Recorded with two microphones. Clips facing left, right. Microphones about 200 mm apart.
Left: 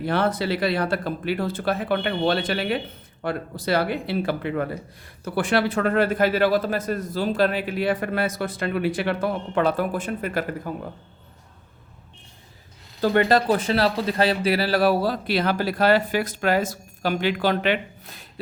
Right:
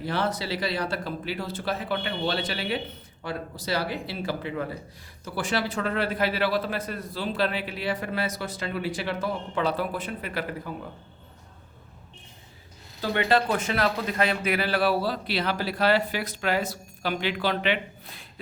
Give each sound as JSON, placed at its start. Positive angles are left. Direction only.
{"t": 0.0, "sound": "a man's voice", "side_deg": 55}
{"t": 13.0, "sound": "a man's voice", "side_deg": 45}